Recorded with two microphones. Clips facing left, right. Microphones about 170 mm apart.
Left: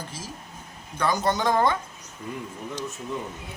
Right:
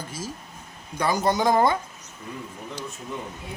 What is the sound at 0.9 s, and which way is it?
Speech, 10° right (ahead or behind).